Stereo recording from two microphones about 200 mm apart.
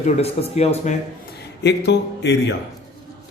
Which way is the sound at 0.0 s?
30° left (ahead or behind).